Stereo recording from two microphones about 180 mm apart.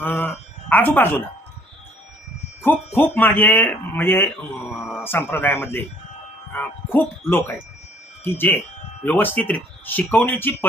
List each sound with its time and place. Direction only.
0.0 s speech: 10° left (ahead or behind)
2.6 s speech: 10° left (ahead or behind)